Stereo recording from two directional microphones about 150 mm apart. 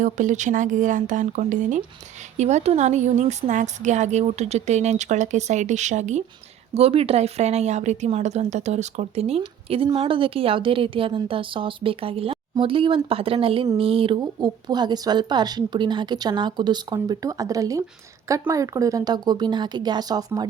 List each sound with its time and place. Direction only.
0.0 s a woman's voice: 55° right (ahead or behind)
6.7 s a woman's voice: 40° right (ahead or behind); by 20.5 s 25° right (ahead or behind)